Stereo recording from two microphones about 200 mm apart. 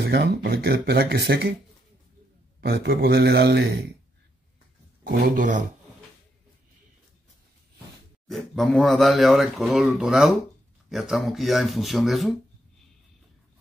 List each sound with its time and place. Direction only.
0.0 s speech: 55° right (ahead or behind)
2.6 s a man's voice: 55° right (ahead or behind)
5.0 s speech: 45° right (ahead or behind)
8.3 s speech: centre (ahead or behind)